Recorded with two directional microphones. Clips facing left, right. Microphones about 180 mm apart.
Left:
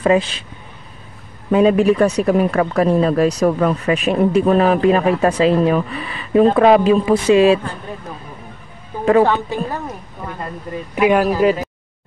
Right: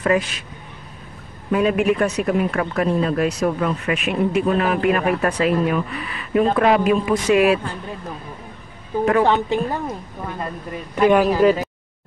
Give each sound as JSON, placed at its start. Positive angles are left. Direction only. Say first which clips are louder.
{"t": 0.0, "sound": "a man's voice", "louder": "left 4 dB", "side_deg": 25}
{"t": 1.5, "sound": "speech", "louder": "left 5 dB", "side_deg": 30}
{"t": 9.2, "sound": "a woman's voice", "louder": "left 1 dB", "side_deg": -20}
{"t": 11.0, "sound": "speech", "louder": "even", "side_deg": 5}